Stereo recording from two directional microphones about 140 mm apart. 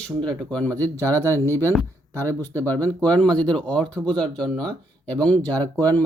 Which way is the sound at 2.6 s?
10° left (ahead or behind).